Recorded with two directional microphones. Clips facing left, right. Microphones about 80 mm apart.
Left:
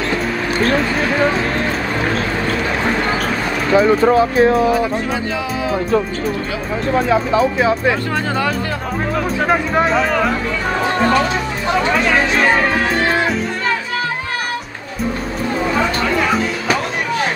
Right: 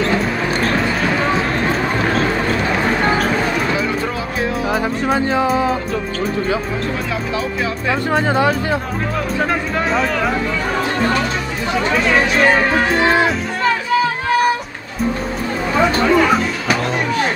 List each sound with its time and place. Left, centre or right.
3.7 s speech: left
4.7 s speech: right
9.8 s speech: centre